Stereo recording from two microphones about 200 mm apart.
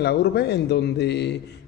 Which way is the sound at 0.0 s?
55° left (ahead or behind).